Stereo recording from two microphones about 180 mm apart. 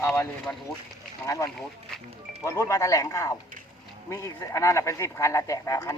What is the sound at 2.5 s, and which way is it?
Speech, 15° left (ahead or behind).